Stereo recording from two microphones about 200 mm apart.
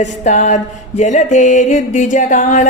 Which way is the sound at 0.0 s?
35° left (ahead or behind).